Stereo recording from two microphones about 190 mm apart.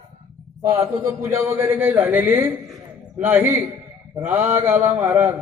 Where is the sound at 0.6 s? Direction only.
20° right (ahead or behind).